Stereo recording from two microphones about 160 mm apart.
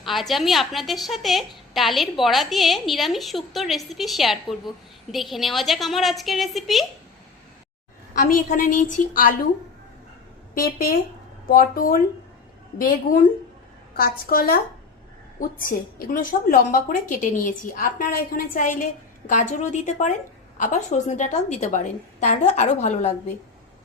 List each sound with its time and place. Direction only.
0.0 s a woman's voice: centre (ahead or behind)
8.1 s a woman's voice: 60° left (ahead or behind)
10.5 s a woman's voice: 65° left (ahead or behind); by 23.1 s 45° left (ahead or behind)